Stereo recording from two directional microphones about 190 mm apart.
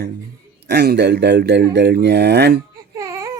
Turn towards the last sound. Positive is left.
turn(degrees=-15)  # may be behind; listen again after turning